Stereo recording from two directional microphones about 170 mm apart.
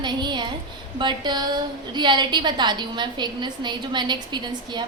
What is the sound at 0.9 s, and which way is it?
A woman's voice, 25° right (ahead or behind).